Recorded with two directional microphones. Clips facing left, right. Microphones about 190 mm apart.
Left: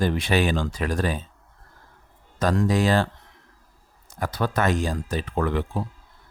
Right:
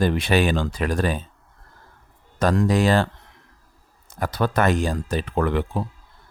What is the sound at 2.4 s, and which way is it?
Speech, 60° right (ahead or behind).